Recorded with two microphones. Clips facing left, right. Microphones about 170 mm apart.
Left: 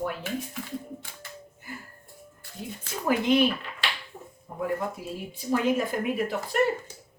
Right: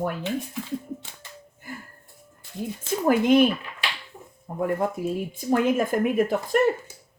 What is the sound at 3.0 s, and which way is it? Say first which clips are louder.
Speech: right 4 dB; 50° right (ahead or behind).